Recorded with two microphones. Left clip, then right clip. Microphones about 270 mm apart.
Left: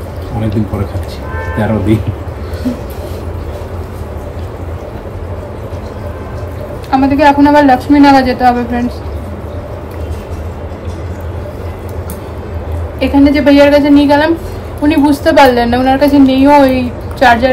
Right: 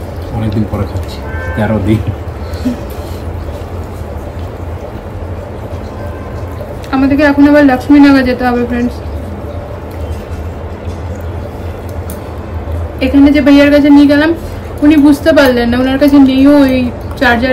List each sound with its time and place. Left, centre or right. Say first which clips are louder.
6.9 s a woman's voice: left 2 dB; centre
13.0 s a woman's voice: right 1 dB; centre